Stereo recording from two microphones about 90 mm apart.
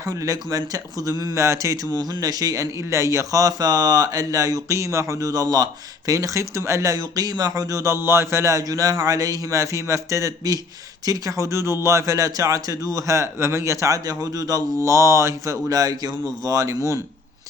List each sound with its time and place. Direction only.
0.0 s speech: 35° right (ahead or behind)
1.9 s speech: 45° right (ahead or behind)